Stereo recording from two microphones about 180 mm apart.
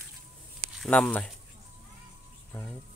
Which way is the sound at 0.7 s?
5° left (ahead or behind).